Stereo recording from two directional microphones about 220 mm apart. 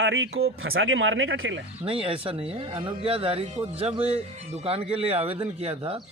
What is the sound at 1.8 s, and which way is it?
Speech, 25° right (ahead or behind).